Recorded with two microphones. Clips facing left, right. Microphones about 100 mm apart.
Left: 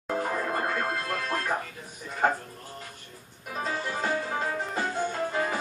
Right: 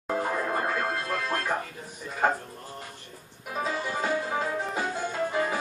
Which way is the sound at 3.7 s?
5° right (ahead or behind).